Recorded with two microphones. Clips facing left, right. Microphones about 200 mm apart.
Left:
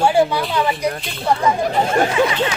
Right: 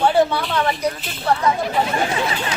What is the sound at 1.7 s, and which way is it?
Speech, 45° left (ahead or behind).